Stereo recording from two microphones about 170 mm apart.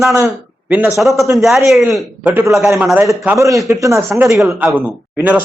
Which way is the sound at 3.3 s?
20° right (ahead or behind).